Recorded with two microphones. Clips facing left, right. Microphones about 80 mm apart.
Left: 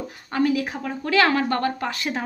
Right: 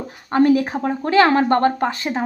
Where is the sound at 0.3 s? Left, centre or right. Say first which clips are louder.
Right 7 dB; right.